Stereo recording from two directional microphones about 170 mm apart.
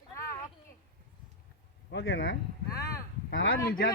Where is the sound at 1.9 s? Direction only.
90° left.